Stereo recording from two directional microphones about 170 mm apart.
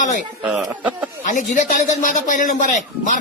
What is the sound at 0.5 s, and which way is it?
Speech, 10° right (ahead or behind).